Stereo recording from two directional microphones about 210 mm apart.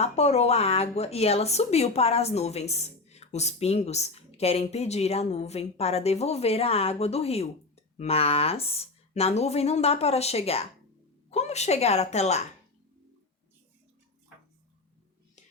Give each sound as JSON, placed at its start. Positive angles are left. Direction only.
{"t": 0.0, "sound": "a woman's voice", "side_deg": 30}